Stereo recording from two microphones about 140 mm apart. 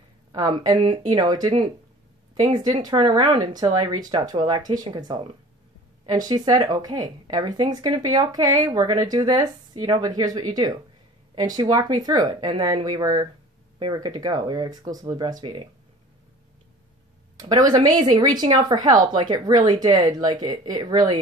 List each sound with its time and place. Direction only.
0.7 s speech: 30° right (ahead or behind)
17.4 s speech: 25° right (ahead or behind)